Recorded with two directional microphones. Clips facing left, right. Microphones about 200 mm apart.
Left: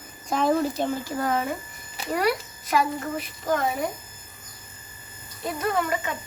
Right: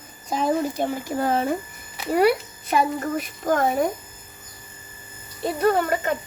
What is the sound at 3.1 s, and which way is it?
Speech, 45° right (ahead or behind).